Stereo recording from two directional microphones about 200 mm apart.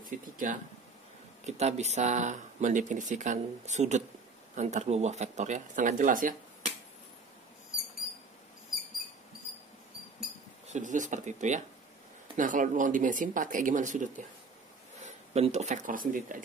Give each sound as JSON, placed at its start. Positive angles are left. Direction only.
{"t": 0.0, "sound": "speech", "side_deg": -40}
{"t": 10.7, "sound": "speech", "side_deg": -40}